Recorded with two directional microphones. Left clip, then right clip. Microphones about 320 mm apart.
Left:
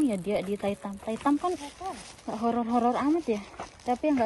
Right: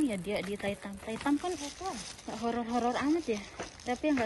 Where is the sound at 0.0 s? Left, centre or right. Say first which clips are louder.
Left 5 dB; centre.